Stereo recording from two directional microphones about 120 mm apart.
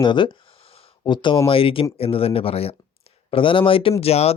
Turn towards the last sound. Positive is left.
turn(degrees=60)  # may be behind; listen again after turning